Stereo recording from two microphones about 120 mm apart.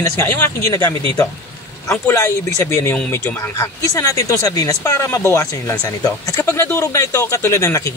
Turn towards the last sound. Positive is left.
turn(degrees=25)  # may be behind; listen again after turning